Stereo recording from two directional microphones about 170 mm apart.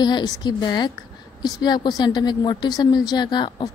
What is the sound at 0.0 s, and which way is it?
A woman's voice, 25° left (ahead or behind).